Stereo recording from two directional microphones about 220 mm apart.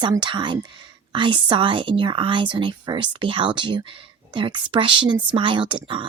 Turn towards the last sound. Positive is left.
turn(degrees=-20)  # may be behind; listen again after turning